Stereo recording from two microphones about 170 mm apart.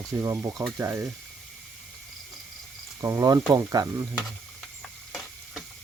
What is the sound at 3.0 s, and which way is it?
Speech, 20° right (ahead or behind).